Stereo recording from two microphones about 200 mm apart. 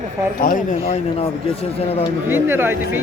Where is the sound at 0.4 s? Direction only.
45° left (ahead or behind).